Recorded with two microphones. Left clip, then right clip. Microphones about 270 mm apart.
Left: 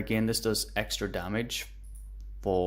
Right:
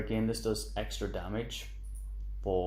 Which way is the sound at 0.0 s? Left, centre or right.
Left.